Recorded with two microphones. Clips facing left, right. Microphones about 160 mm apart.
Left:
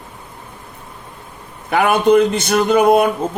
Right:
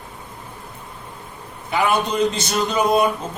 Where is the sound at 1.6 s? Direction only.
60° left (ahead or behind).